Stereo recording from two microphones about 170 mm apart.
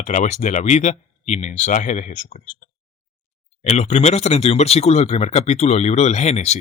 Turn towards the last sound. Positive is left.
turn(degrees=40)  # may be behind; listen again after turning